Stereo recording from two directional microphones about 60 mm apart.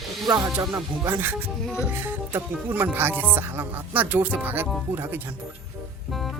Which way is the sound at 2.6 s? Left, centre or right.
Right.